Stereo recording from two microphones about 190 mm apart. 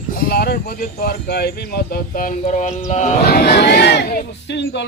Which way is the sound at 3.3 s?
55° left (ahead or behind).